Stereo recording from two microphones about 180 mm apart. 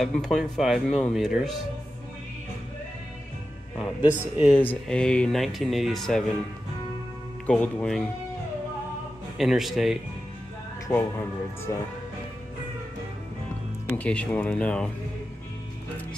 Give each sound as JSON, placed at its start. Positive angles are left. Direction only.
{"t": 0.0, "sound": "speech", "side_deg": 0}
{"t": 3.7, "sound": "speech", "side_deg": -5}
{"t": 4.6, "sound": "speech", "side_deg": 5}
{"t": 7.4, "sound": "speech", "side_deg": 5}
{"t": 9.4, "sound": "speech", "side_deg": 0}
{"t": 10.9, "sound": "speech", "side_deg": 10}
{"t": 13.9, "sound": "speech", "side_deg": 10}